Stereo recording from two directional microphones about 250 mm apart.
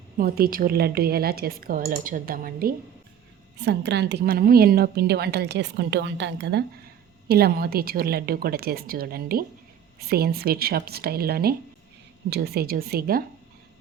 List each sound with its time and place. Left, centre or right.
0.2 s a woman's voice: right